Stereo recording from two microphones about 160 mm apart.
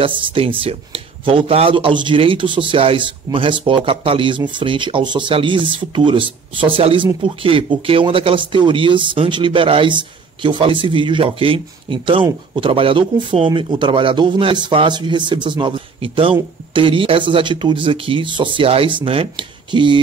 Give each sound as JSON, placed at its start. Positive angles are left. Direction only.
{"t": 0.0, "sound": "speech", "side_deg": -30}